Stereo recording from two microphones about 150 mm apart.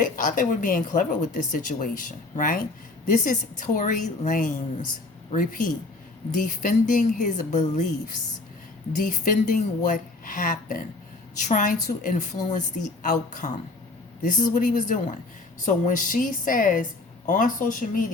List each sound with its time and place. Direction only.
0.0 s speech: 60° left (ahead or behind)